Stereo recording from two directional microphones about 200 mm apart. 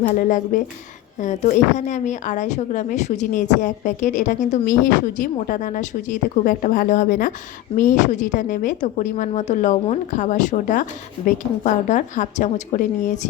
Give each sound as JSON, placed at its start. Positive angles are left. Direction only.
{"t": 0.1, "sound": "speech", "side_deg": 40}